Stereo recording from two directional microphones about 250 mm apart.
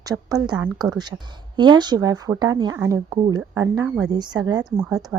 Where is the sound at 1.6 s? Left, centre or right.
Centre.